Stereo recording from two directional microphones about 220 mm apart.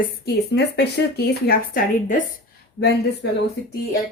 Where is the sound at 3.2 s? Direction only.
50° left (ahead or behind).